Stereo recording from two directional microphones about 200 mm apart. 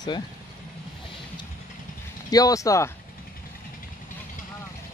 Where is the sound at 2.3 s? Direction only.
15° left (ahead or behind).